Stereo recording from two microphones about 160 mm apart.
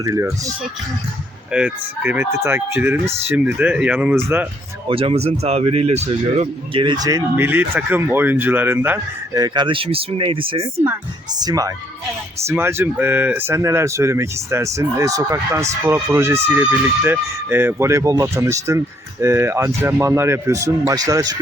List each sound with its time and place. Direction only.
0.0 s speech: 20° right (ahead or behind)
1.5 s speech: 5° right (ahead or behind)
4.9 s speech: 35° right (ahead or behind); by 9.4 s 15° right (ahead or behind)
9.4 s speech: 30° right (ahead or behind)
11.3 s speech: 25° right (ahead or behind)